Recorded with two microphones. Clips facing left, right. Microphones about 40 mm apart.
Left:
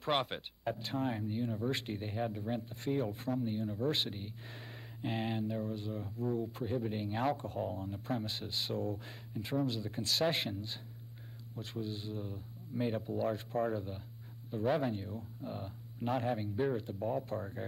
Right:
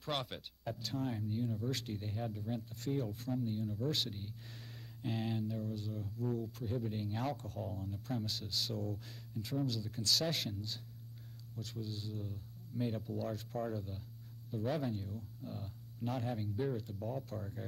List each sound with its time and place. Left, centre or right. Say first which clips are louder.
0.0 s speech: left 6 dB; left